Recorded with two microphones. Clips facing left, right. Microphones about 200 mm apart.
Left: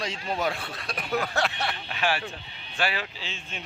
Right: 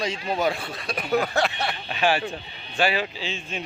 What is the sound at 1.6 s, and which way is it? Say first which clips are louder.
Speech: right 4 dB; 20° right (ahead or behind).